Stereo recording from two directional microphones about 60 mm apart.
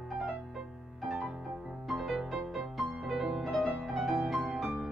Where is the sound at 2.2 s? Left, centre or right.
Centre.